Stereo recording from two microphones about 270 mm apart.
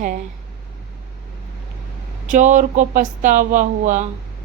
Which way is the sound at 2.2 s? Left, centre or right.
Right.